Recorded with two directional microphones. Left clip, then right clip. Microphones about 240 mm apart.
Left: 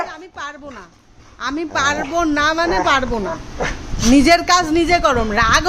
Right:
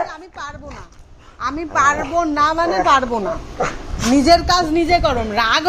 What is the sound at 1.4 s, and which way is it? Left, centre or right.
A woman's voice, centre.